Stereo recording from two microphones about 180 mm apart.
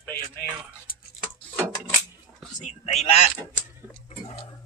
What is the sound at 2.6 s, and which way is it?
Speech, 40° left (ahead or behind).